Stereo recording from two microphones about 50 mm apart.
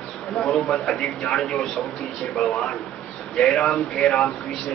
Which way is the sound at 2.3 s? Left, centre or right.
Centre.